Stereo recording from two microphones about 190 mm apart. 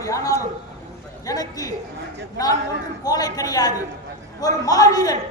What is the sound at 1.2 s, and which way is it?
Speech, 20° left (ahead or behind).